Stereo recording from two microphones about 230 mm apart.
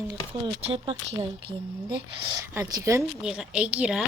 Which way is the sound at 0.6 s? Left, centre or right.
Right.